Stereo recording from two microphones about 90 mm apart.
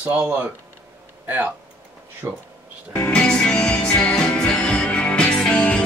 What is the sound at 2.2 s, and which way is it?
Speech, 25° right (ahead or behind).